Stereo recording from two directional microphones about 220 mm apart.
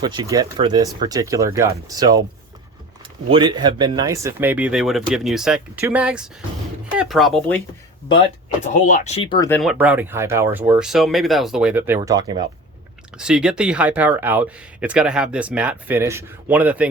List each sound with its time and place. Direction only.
0.0 s speech: 20° right (ahead or behind)
3.2 s speech: 20° right (ahead or behind); by 7.6 s 5° left (ahead or behind)
8.7 s speech: 35° left (ahead or behind)
9.5 s speech: centre (ahead or behind)
11.9 s speech: 20° right (ahead or behind)
13.1 s speech: 5° right (ahead or behind)